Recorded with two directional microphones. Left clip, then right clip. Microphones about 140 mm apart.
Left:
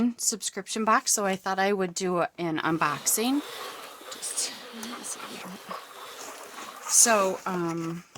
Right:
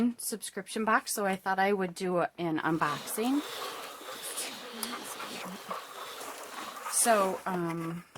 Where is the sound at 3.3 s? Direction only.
Centre (ahead or behind).